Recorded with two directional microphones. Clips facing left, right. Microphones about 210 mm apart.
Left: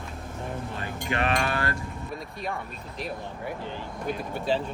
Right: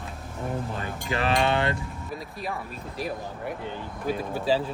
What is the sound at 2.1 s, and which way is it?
Speech, centre (ahead or behind).